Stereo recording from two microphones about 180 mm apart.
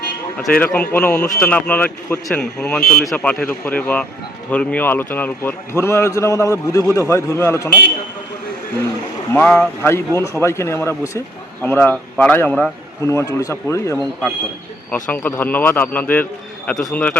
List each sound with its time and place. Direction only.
0.6 s a man's voice: 10° left (ahead or behind)
9.3 s a man's voice: 10° left (ahead or behind)
13.1 s a man's voice: 15° left (ahead or behind)
15.1 s a man's voice: 10° left (ahead or behind)